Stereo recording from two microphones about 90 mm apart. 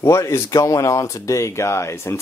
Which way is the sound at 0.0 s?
35° left (ahead or behind).